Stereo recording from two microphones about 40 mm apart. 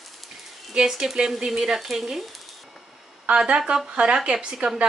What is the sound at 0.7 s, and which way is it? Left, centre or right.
Speech, centre.